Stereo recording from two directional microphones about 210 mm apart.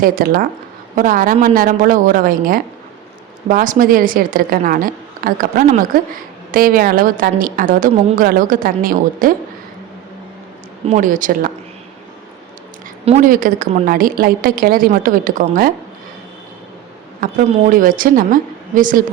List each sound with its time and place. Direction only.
0.0 s a woman's voice: 40° right (ahead or behind)
10.8 s a woman's voice: 35° right (ahead or behind)
13.1 s a woman's voice: 35° right (ahead or behind)
17.2 s a woman's voice: 40° right (ahead or behind)